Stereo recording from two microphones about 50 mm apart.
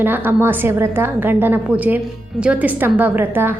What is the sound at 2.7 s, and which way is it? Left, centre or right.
Speech, right.